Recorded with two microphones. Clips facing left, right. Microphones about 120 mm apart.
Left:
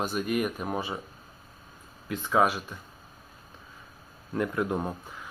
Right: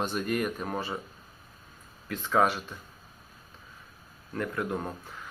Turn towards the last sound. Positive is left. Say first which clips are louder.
# left 3 dB
turn(degrees=20)  # may be behind; listen again after turning